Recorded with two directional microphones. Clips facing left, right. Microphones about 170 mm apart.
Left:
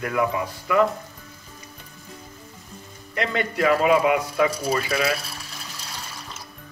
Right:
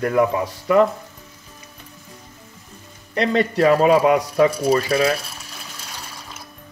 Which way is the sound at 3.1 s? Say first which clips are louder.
Right 6 dB; 35° right (ahead or behind).